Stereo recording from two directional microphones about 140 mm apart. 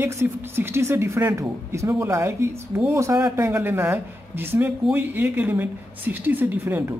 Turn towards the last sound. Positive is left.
turn(degrees=-15)  # may be behind; listen again after turning